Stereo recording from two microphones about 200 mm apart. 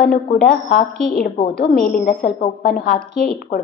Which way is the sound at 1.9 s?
55° left (ahead or behind).